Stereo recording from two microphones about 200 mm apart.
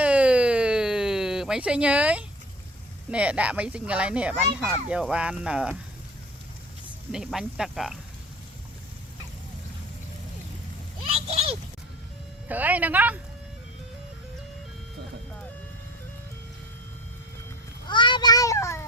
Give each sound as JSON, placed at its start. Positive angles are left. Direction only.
{"t": 0.0, "sound": "a sound", "side_deg": -5}
{"t": 3.1, "sound": "speech", "side_deg": -5}
{"t": 7.1, "sound": "speech", "side_deg": 0}
{"t": 11.0, "sound": "a sound", "side_deg": -30}
{"t": 12.5, "sound": "speech", "side_deg": -10}
{"t": 17.8, "sound": "child singing", "side_deg": 25}